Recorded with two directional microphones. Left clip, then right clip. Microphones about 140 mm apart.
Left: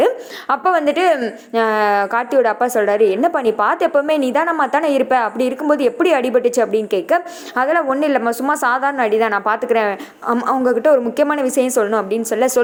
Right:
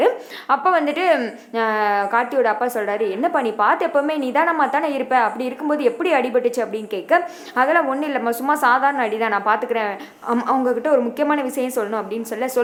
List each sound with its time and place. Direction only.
0.0 s a woman's voice: 40° left (ahead or behind)